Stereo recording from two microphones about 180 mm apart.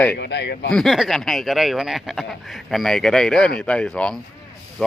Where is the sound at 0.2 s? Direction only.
75° left (ahead or behind).